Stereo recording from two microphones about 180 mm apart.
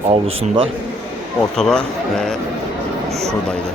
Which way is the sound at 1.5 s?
5° left (ahead or behind).